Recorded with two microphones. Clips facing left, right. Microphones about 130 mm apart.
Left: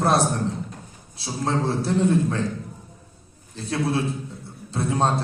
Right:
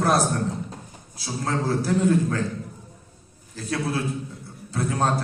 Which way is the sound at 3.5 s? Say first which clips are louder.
Left 2 dB; 25° left (ahead or behind).